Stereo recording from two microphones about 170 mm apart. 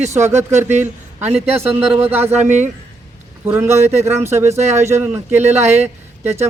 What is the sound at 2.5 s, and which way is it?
Speech, 45° right (ahead or behind).